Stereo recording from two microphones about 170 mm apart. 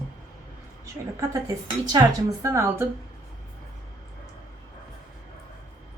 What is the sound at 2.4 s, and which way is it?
Speech, 15° right (ahead or behind).